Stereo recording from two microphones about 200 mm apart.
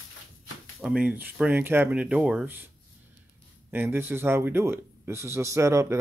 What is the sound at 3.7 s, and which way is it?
Speech, 10° right (ahead or behind).